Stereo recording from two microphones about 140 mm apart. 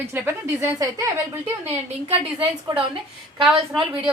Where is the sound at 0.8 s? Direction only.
25° right (ahead or behind).